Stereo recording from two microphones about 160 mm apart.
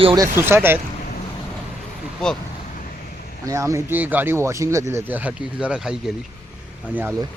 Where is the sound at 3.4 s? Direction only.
20° right (ahead or behind).